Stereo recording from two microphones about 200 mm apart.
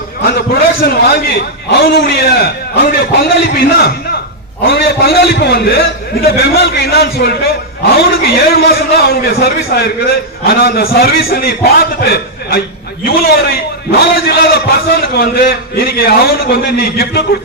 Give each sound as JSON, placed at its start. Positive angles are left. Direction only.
{"t": 0.3, "sound": "a man's voice", "side_deg": 45}